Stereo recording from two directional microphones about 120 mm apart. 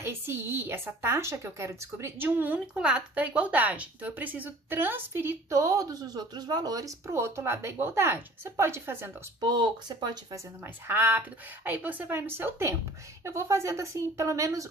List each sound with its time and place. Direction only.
0.0 s a woman's voice: 20° right (ahead or behind)
9.4 s speech: 35° right (ahead or behind)
10.6 s a woman's voice: 20° right (ahead or behind)